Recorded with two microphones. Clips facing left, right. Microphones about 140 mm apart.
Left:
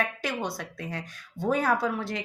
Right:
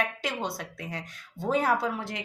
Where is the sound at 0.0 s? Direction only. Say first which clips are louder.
Left 1 dB; 25° right (ahead or behind).